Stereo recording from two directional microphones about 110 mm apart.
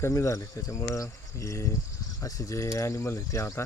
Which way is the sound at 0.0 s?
25° left (ahead or behind).